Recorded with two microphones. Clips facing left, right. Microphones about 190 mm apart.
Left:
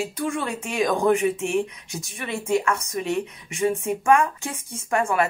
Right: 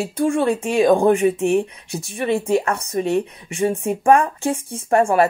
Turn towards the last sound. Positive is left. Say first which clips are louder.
# right 7 dB
turn(degrees=-35)  # may be behind; listen again after turning